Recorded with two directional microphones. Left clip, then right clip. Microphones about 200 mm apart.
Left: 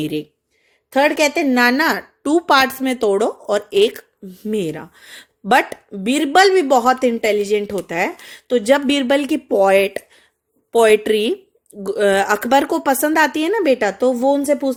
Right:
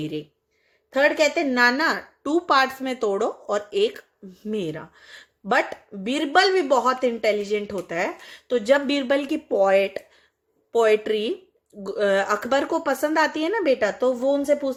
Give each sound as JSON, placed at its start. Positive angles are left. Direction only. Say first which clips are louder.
{"t": 0.0, "sound": "speech", "louder": "left 7 dB", "side_deg": 50}